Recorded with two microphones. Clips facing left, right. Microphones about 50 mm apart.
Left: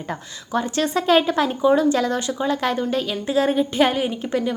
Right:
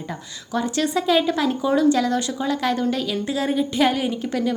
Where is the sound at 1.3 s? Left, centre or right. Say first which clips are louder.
Left 3 dB; left.